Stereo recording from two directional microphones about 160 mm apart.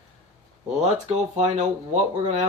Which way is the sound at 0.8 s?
45° right (ahead or behind).